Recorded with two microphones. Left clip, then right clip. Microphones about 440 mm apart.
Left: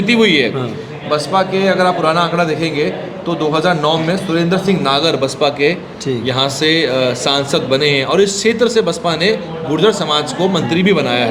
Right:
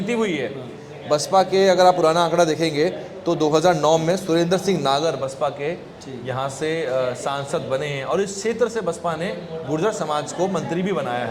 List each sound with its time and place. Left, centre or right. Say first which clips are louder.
0.1 s speech: left 11 dB; centre
1.1 s a man's voice: left 3 dB; right
5.0 s speech: left 8 dB; centre